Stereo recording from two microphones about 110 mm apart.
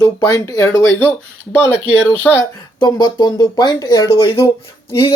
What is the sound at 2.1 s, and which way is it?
Speech, 20° left (ahead or behind).